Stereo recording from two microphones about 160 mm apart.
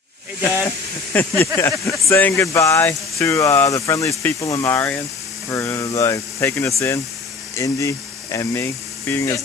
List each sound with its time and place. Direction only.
1.1 s speech: 15° left (ahead or behind)